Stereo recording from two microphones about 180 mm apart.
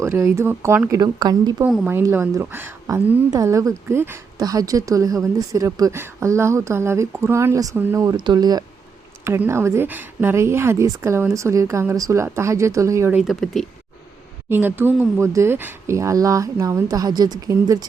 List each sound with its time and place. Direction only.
0.0 s a woman's voice: 15° right (ahead or behind)
1.6 s a woman's voice: 10° right (ahead or behind)
13.1 s speech: centre (ahead or behind)
14.5 s a woman's voice: 10° right (ahead or behind)